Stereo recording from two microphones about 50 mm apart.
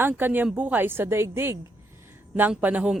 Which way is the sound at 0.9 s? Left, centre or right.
Right.